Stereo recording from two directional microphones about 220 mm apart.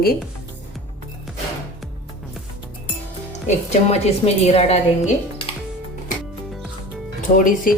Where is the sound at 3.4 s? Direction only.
30° left (ahead or behind).